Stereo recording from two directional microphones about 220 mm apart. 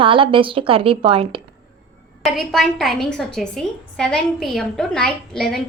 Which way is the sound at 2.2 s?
Centre (ahead or behind).